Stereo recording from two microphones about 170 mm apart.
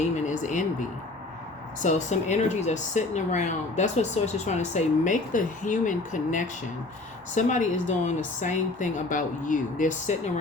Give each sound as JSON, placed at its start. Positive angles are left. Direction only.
{"t": 0.2, "sound": "speech", "side_deg": 45}